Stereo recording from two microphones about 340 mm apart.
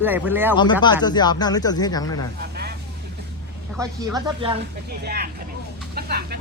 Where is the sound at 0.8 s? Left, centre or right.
Centre.